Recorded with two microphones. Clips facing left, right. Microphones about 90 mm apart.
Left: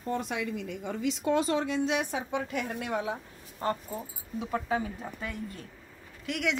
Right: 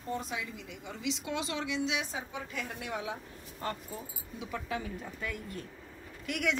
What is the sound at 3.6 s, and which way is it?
Speech, 30° left (ahead or behind).